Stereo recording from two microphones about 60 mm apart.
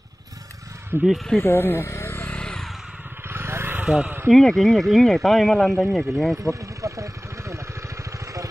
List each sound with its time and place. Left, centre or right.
0.9 s speech: right
1.4 s speech: left
2.0 s a sound: left
2.2 s a sound: centre
3.3 s vehicle: right
3.8 s speech: centre
4.3 s speech: centre
6.8 s vehicle: right